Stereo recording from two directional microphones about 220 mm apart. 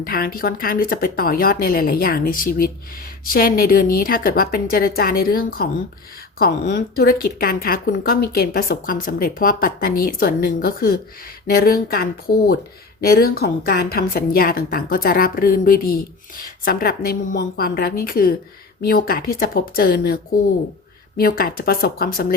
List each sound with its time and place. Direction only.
0.0 s a woman's voice: 40° left (ahead or behind)
21.2 s a woman's voice: 40° left (ahead or behind)